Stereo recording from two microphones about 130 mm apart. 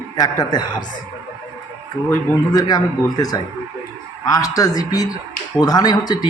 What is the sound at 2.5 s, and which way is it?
A man's voice, 30° left (ahead or behind).